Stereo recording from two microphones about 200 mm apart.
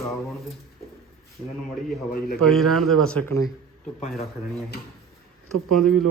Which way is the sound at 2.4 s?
Centre (ahead or behind).